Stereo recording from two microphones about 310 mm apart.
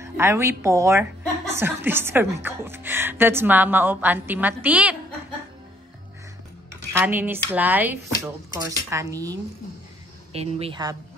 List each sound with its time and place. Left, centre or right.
0.0 s a woman's voice: centre
6.7 s dishes: centre
8.2 s a woman's voice: centre